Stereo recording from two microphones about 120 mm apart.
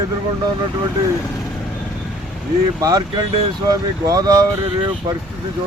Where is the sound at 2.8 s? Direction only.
30° right (ahead or behind).